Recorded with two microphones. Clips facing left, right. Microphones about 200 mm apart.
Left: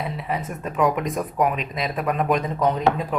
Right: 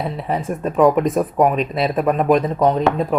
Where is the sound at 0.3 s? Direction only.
30° right (ahead or behind).